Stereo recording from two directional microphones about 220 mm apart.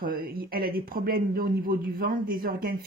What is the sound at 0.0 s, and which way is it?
Speech, 40° right (ahead or behind).